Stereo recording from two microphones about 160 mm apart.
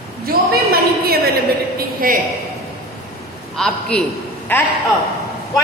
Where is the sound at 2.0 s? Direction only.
60° right (ahead or behind).